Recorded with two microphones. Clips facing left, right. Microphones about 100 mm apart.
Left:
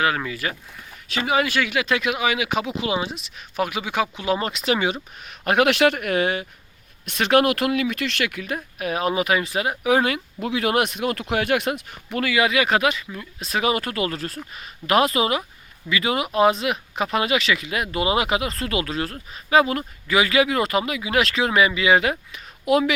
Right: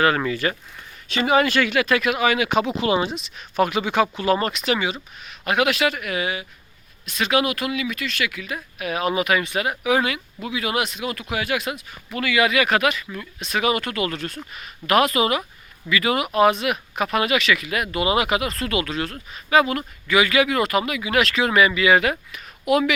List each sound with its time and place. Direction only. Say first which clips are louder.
0.0 s speech: right 3 dB; 5° left (ahead or behind)
4.5 s speech: left 1 dB; 25° left (ahead or behind)
5.5 s speech: left 3 dB; 55° left (ahead or behind)
7.0 s speech: left 3 dB; 60° left (ahead or behind); by 10.2 s 40° left (ahead or behind)
10.4 s speech: left 3 dB; 50° left (ahead or behind)
12.2 s speech: right 1 dB; 30° left (ahead or behind)